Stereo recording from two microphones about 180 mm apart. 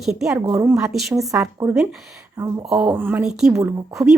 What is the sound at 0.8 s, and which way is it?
Speech, 5° right (ahead or behind).